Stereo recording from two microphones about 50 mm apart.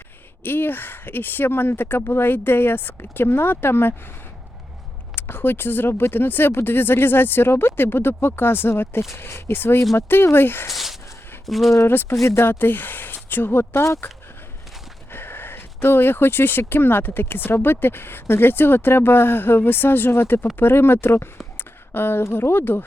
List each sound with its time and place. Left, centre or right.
0.4 s speech: left
5.1 s speech: left
10.7 s a sound: centre
11.4 s speech: centre
11.9 s speech: left
12.5 s speech: left
13.8 s speech: left
15.1 s speech: left
21.6 s a sound: left
22.3 s speech: left